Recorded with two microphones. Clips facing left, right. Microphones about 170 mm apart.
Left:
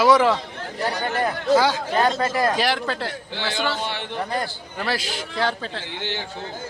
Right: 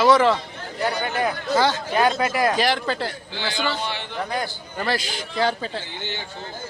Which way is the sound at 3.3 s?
65° left (ahead or behind).